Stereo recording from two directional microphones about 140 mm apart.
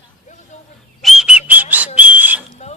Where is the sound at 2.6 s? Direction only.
50° left (ahead or behind).